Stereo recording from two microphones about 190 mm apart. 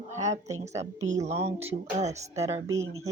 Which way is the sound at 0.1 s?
40° right (ahead or behind).